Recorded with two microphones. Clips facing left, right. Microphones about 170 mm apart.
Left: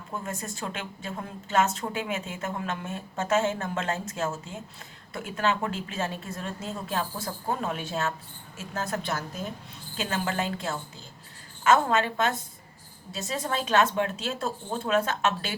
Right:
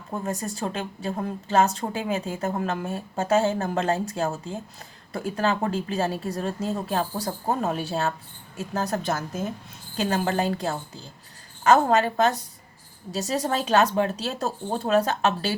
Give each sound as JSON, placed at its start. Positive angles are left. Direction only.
{"t": 0.1, "sound": "a woman's voice", "side_deg": -35}